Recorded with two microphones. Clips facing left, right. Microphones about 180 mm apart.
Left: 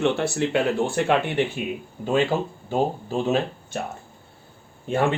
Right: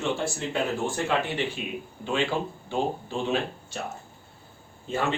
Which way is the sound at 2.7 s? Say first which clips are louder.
Left 5 dB; 40° left (ahead or behind).